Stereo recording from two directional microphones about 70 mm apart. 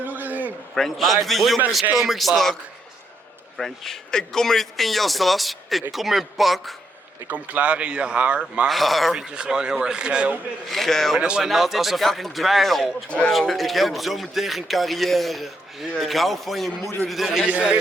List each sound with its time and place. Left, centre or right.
0.0 s a sound: right
0.7 s a man's voice: centre
3.6 s a man's voice: centre
7.3 s speech: right
8.6 s a man's voice: centre
9.1 s speech: centre
10.7 s a man's voice: centre
11.2 s a man's voice: centre
13.1 s speech: centre
13.4 s a man's voice: centre